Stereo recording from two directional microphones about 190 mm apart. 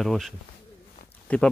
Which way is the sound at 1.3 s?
10° left (ahead or behind).